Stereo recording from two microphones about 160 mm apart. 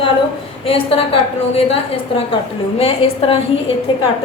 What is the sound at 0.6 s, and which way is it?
Speech, 35° left (ahead or behind).